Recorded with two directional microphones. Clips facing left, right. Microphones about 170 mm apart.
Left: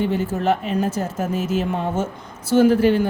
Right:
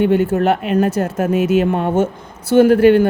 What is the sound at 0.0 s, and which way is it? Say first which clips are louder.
Speech: right 7 dB; 65° right (ahead or behind).